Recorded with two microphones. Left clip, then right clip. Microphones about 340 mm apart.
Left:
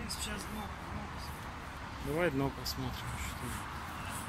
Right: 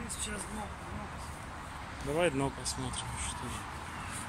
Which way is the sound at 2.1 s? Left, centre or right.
Centre.